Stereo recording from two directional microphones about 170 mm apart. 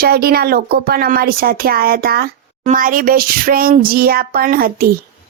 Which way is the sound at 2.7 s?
55° right (ahead or behind).